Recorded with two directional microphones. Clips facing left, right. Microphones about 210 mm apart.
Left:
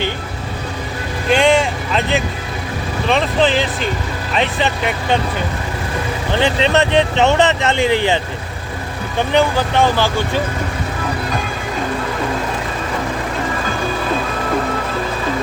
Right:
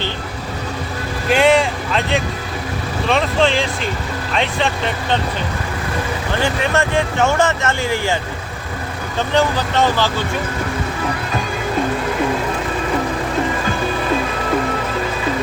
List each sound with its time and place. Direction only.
1.3 s vehicle: 5° right (ahead or behind)
3.1 s speech: centre (ahead or behind)
6.4 s speech: 20° left (ahead or behind)